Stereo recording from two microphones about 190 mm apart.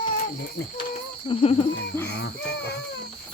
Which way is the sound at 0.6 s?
55° left (ahead or behind).